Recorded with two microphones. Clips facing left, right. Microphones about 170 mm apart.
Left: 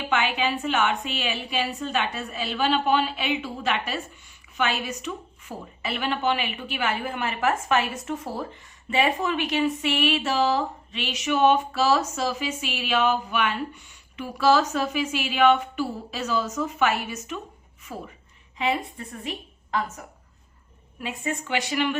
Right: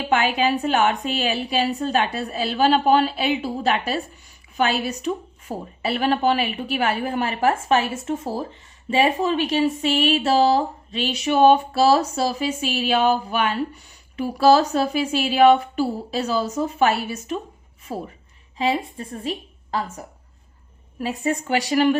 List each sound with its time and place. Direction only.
0.0 s a woman's voice: 40° right (ahead or behind)
21.0 s speech: 40° right (ahead or behind)